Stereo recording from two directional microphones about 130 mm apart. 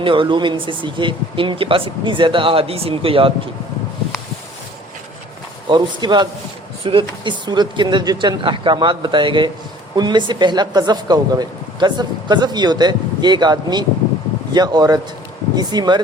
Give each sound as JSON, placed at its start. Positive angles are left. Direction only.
{"t": 0.0, "sound": "speech", "side_deg": -40}
{"t": 5.6, "sound": "speech", "side_deg": -35}